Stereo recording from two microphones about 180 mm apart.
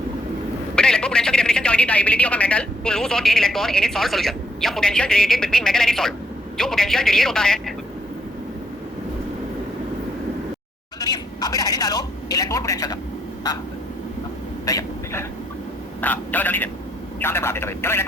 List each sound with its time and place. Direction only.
0.8 s a man's voice: 5° left (ahead or behind)
11.0 s a sound: 20° left (ahead or behind)
14.6 s vehicle: 20° left (ahead or behind)
17.2 s speech: 15° left (ahead or behind)